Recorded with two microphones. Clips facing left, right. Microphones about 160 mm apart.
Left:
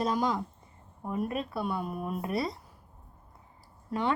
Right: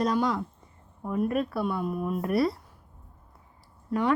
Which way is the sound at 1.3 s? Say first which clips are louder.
Right 6 dB; 25° left (ahead or behind).